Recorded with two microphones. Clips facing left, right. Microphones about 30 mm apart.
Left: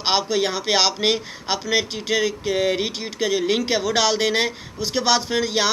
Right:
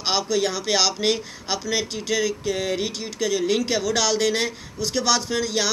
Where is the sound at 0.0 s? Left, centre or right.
Left.